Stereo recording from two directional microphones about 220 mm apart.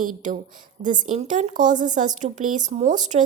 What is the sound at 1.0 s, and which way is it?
A woman's voice, 35° right (ahead or behind).